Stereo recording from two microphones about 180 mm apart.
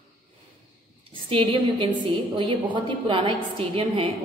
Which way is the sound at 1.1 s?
30° right (ahead or behind).